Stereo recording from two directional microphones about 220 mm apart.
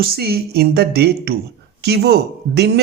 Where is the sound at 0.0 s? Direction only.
45° right (ahead or behind).